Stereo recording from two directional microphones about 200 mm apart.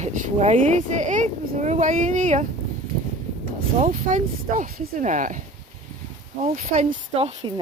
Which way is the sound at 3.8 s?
40° right (ahead or behind).